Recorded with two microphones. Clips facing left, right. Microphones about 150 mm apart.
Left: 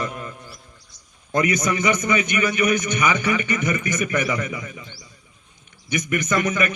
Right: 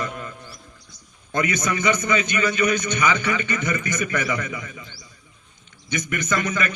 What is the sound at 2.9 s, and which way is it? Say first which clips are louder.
Mantra: left 1 dB; 15° left (ahead or behind).